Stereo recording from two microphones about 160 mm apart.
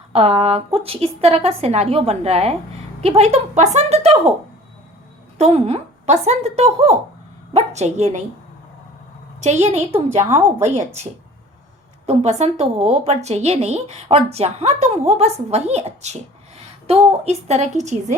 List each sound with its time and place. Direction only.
0.1 s a woman's voice: 40° right (ahead or behind)
5.4 s a woman's voice: 40° right (ahead or behind)
9.4 s a woman's voice: 45° right (ahead or behind)